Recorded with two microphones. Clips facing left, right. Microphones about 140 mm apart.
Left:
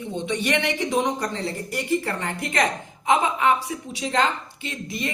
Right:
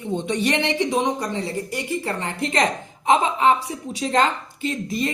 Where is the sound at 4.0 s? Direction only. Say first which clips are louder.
Right 3 dB; 40° right (ahead or behind).